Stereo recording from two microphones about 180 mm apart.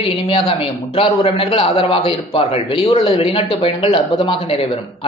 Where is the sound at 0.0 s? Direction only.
30° left (ahead or behind).